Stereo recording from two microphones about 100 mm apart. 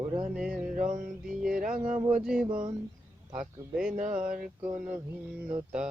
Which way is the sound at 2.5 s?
50° right (ahead or behind).